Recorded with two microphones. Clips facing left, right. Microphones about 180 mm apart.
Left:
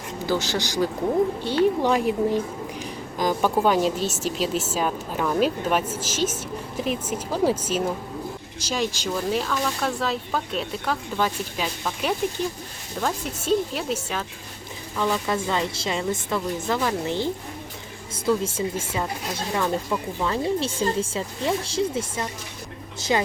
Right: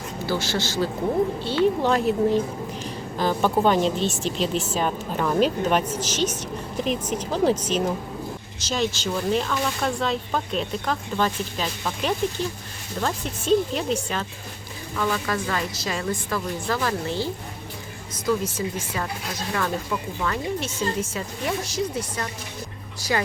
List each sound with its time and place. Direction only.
0.3 s a woman's voice: 15° left (ahead or behind)
14.9 s a woman's voice: 20° left (ahead or behind)
19.5 s a woman's voice: 15° left (ahead or behind)
20.2 s a woman's voice: 30° left (ahead or behind)